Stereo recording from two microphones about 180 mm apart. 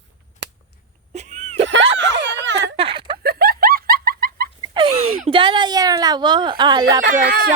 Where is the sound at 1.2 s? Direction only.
40° right (ahead or behind).